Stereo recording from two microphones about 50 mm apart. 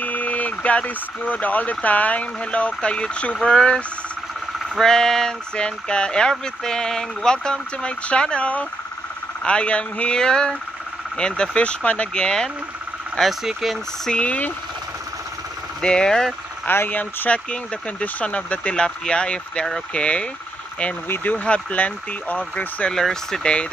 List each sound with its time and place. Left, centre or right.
0.0 s speech: left
12.1 s speech: centre
13.2 s speech: centre
14.2 s speech: left
15.8 s speech: centre
16.7 s speech: left
18.0 s speech: left
21.1 s speech: left
21.5 s speech: left
22.8 s speech: centre
23.4 s speech: left